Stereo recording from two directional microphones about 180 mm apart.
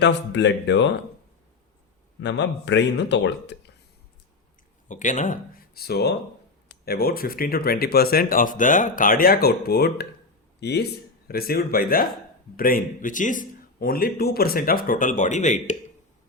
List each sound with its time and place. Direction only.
0.0 s speech: 75° left (ahead or behind)
2.2 s speech: 75° left (ahead or behind)
4.9 s a man's voice: 45° left (ahead or behind)